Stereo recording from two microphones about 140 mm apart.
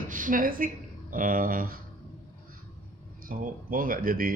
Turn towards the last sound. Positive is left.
turn(degrees=-90)